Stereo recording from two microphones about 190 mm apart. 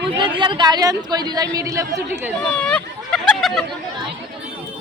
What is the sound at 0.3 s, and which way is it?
A woman's voice, 25° right (ahead or behind).